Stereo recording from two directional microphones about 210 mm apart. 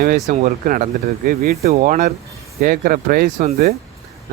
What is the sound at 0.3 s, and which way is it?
Speech, 40° right (ahead or behind).